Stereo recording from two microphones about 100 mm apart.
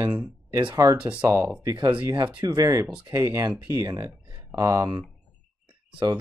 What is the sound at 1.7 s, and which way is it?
Speech, 50° right (ahead or behind).